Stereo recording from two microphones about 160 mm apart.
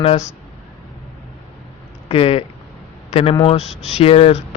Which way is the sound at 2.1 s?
35° left (ahead or behind).